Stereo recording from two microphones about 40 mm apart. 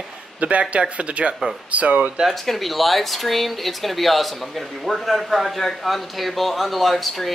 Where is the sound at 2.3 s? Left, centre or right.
Centre.